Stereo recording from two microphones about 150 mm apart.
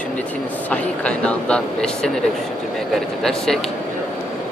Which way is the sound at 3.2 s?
Centre (ahead or behind).